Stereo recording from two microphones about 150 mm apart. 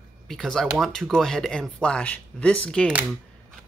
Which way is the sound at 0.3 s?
5° left (ahead or behind).